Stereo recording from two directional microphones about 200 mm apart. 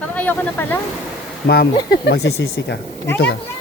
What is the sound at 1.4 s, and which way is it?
Speech, 55° left (ahead or behind).